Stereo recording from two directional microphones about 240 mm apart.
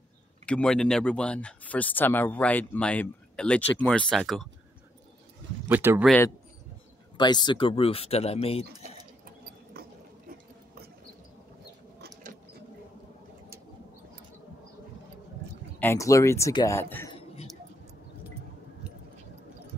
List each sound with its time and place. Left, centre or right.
0.5 s speech: centre
5.7 s speech: centre
7.2 s speech: centre
9.8 s dog: right
15.8 s speech: centre